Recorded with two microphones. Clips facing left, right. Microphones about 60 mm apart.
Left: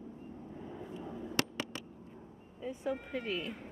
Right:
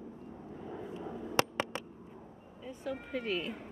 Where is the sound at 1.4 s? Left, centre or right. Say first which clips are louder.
Right 5 dB; right.